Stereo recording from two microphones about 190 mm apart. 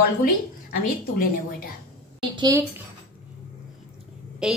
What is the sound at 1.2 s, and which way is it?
Speech, 50° left (ahead or behind).